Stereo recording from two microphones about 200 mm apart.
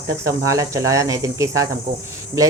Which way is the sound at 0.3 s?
15° right (ahead or behind).